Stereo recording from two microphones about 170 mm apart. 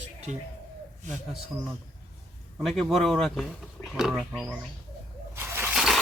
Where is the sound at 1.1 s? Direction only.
5° right (ahead or behind).